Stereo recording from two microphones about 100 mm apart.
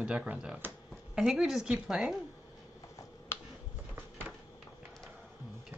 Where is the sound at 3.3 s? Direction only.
25° left (ahead or behind).